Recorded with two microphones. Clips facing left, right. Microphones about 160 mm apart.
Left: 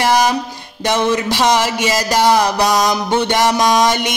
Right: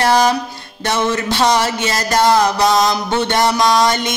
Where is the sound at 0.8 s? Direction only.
15° left (ahead or behind).